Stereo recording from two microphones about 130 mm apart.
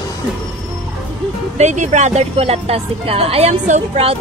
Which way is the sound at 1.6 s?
70° right (ahead or behind).